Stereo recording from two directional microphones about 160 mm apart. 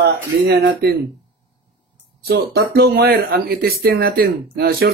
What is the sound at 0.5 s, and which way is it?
Speech, 90° right.